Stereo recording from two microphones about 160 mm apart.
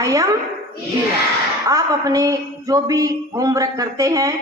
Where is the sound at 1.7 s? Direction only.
20° right (ahead or behind).